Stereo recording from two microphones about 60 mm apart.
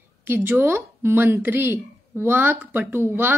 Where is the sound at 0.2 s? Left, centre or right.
Right.